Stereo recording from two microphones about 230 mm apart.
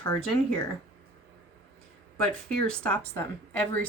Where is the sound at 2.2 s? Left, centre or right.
Centre.